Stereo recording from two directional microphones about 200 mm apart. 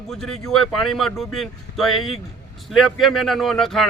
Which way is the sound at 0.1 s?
5° left (ahead or behind).